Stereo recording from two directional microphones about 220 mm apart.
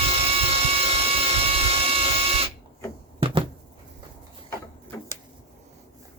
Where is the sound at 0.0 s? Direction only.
25° right (ahead or behind).